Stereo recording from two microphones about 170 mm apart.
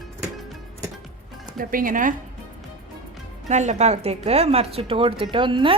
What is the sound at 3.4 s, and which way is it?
A woman's voice, 45° right (ahead or behind).